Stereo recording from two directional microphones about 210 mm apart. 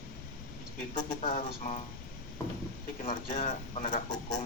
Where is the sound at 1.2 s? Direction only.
30° left (ahead or behind).